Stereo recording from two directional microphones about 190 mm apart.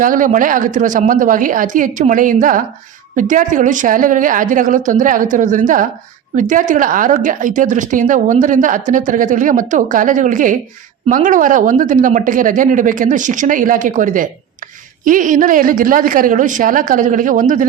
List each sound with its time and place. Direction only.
0.0 s speech: 45° right (ahead or behind)